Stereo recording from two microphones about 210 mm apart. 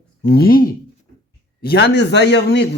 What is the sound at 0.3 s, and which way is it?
A man's voice, 45° left (ahead or behind).